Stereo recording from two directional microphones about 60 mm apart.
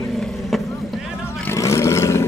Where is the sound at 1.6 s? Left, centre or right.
Left.